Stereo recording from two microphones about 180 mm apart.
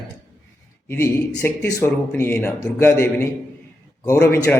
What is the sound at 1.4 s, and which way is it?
A man's voice, 10° left (ahead or behind).